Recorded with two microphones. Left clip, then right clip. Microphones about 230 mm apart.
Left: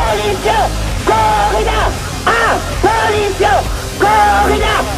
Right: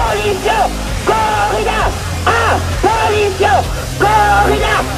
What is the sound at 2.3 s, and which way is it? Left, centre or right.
Music, right.